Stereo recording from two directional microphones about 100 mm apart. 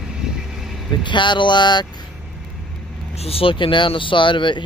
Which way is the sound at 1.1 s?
55° left (ahead or behind).